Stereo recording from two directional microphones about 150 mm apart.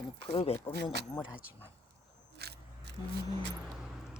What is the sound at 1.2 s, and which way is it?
Speech, 10° right (ahead or behind).